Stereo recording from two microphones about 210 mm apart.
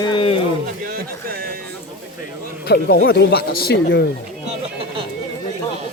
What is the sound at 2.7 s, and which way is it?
Speech, 45° left (ahead or behind).